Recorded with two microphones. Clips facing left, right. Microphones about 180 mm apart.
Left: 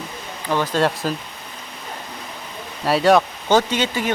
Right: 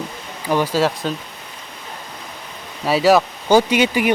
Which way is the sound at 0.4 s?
10° right (ahead or behind).